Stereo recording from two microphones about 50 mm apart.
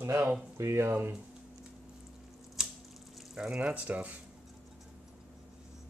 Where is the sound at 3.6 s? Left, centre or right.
Right.